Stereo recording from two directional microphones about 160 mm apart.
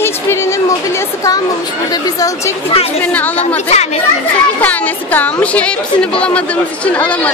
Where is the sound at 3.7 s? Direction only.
45° left (ahead or behind).